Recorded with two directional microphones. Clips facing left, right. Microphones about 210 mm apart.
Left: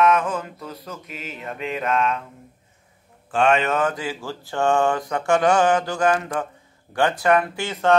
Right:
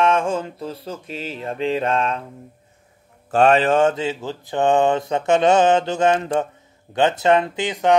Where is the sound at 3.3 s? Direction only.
35° right (ahead or behind).